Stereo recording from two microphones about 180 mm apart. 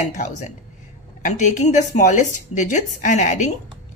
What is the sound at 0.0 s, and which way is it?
A woman's voice, 40° left (ahead or behind).